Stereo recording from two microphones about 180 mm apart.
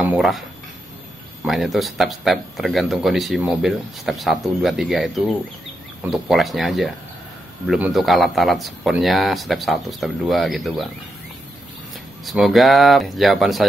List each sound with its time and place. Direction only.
0.0 s speech: 5° right (ahead or behind)
12.3 s speech: centre (ahead or behind)